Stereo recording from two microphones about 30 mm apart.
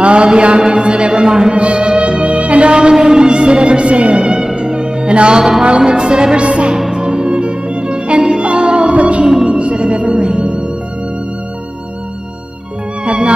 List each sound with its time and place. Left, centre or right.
0.0 s mantra: right
0.7 s music: right
1.3 s speech: centre
1.6 s music: right
4.2 s music: right
5.8 s speech: right
6.3 s music: right
6.9 s music: right
8.9 s music: right
9.3 s music: centre
9.6 s music: right
13.0 s music: right